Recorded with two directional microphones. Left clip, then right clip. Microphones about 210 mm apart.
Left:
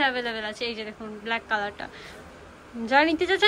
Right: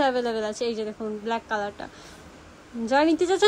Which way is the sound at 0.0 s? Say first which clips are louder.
Right 2 dB; 25° right (ahead or behind).